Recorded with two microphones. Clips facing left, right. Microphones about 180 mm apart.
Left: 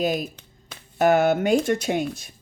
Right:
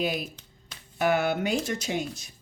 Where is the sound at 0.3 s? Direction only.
55° left (ahead or behind).